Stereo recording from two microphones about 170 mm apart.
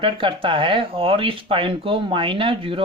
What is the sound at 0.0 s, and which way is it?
Speech, 30° right (ahead or behind).